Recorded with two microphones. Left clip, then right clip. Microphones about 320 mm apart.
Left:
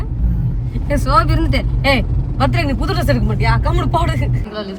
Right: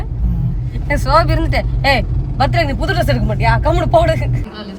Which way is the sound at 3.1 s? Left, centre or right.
Centre.